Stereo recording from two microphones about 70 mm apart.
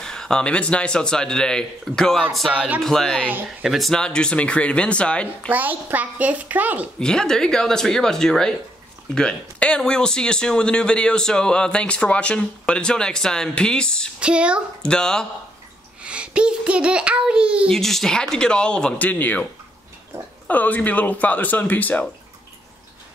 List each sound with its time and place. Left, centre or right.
0.0 s speech: centre
4.0 s speech: centre
5.5 s a child's voice: right
7.0 s speech: centre
14.2 s a woman's voice: centre
14.8 s speech: centre
16.0 s a child's voice: centre
17.7 s speech: centre
19.0 s a man's voice: left